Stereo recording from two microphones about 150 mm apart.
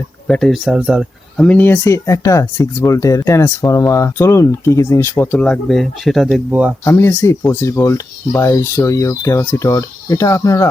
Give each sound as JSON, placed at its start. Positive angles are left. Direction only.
{"t": 0.3, "sound": "speech", "side_deg": 5}
{"t": 1.5, "sound": "speech", "side_deg": 10}
{"t": 6.8, "sound": "speech", "side_deg": 15}